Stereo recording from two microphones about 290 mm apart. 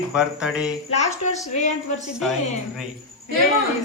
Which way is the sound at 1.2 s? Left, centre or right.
Left.